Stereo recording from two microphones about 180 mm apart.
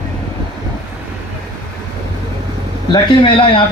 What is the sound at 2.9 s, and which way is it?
Speech, 25° left (ahead or behind).